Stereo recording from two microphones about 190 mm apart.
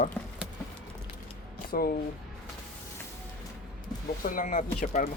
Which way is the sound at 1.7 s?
50° left (ahead or behind).